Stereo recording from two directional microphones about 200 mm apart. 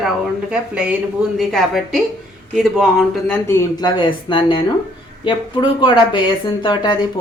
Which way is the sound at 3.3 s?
15° left (ahead or behind).